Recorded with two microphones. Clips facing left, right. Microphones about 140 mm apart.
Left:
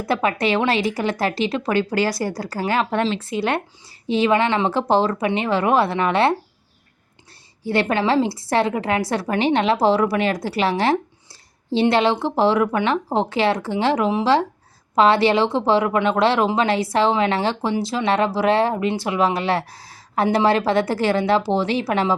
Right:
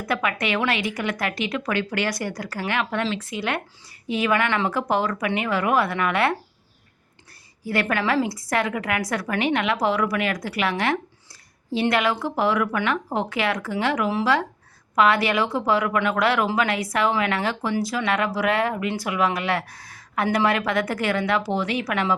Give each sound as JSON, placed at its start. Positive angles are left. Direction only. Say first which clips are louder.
{"t": 0.0, "sound": "a woman's voice", "louder": "left 5 dB", "side_deg": 30}
{"t": 7.6, "sound": "a woman's voice", "louder": "left 4 dB", "side_deg": 25}